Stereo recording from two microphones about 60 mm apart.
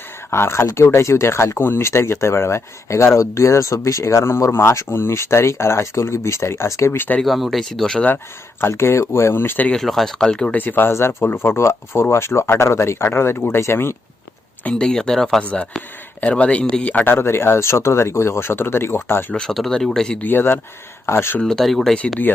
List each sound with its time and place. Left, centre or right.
0.3 s speech: left
6.9 s speech: left
7.3 s speech: centre
8.7 s speech: left
9.7 s speech: centre
10.5 s speech: left
10.9 s speech: left
14.6 s speech: centre
15.4 s speech: centre
17.1 s speech: left
19.3 s speech: centre
20.1 s speech: left
21.4 s speech: centre